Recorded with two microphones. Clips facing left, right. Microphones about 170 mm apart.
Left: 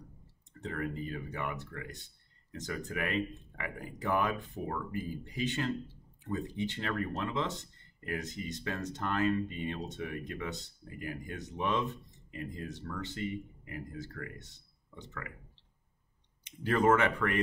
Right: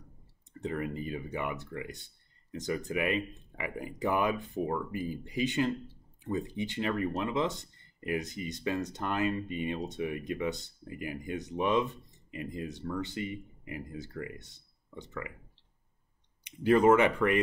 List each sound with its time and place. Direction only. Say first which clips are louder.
0.6 s speech: right 3 dB; 15° right (ahead or behind)
16.4 s speech: right 5 dB; 15° right (ahead or behind)